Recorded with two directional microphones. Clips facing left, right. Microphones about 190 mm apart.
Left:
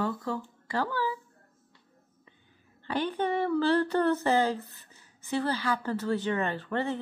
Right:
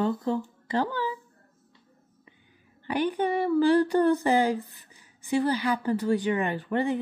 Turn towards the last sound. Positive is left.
turn(degrees=-15)  # may be behind; listen again after turning